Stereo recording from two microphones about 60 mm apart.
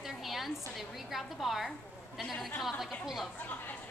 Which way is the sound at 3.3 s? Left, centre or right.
Left.